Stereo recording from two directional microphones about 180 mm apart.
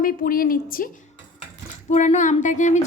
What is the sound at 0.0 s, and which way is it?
Speech, 50° left (ahead or behind).